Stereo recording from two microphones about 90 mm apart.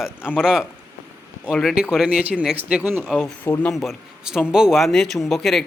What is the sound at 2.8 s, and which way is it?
Speech, 20° right (ahead or behind).